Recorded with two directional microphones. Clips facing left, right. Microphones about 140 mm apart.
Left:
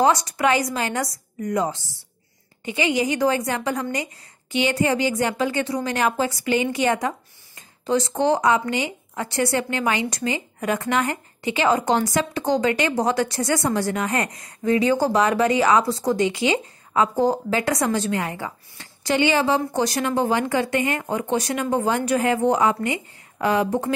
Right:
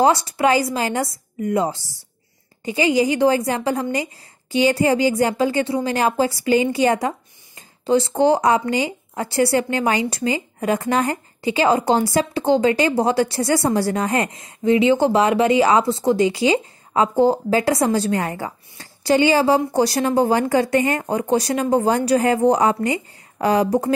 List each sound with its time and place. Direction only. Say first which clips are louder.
0.0 s a woman's voice: right 2 dB; 30° right (ahead or behind)